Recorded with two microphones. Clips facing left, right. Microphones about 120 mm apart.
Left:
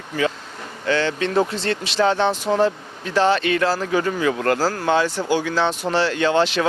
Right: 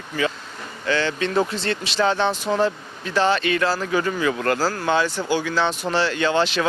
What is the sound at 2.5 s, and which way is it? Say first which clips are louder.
Speech: left 3 dB; 40° left (ahead or behind).